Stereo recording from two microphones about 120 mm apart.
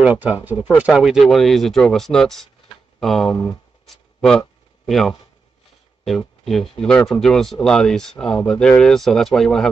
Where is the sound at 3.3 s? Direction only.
15° left (ahead or behind).